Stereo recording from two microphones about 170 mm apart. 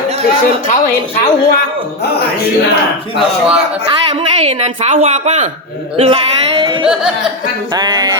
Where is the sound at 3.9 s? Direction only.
35° right (ahead or behind).